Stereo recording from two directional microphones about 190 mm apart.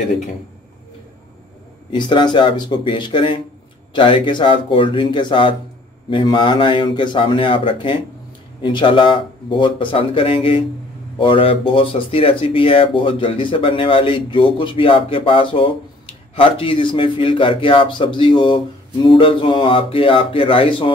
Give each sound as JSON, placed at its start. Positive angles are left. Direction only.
{"t": 1.9, "sound": "speech", "side_deg": 25}